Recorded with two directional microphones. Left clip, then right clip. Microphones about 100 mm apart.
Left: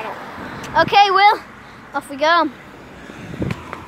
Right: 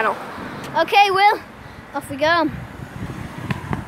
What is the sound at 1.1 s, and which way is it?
Speech, 15° right (ahead or behind).